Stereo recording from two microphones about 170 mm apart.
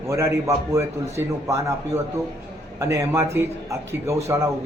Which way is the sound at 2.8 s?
20° right (ahead or behind).